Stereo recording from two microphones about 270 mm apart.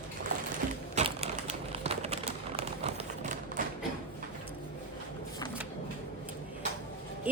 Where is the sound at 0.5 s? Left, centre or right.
Right.